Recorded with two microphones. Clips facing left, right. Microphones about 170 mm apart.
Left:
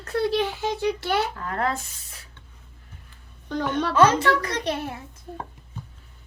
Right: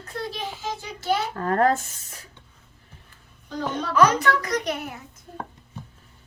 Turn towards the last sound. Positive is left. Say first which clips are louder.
# even
turn(degrees=30)  # may be behind; listen again after turning